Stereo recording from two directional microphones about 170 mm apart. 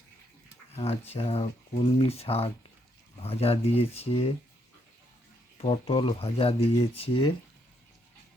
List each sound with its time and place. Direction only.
0.8 s speech: 35° left (ahead or behind)
5.5 s speech: 35° left (ahead or behind)